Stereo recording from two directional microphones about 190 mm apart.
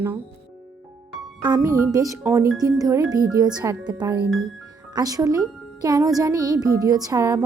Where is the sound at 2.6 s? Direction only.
20° right (ahead or behind).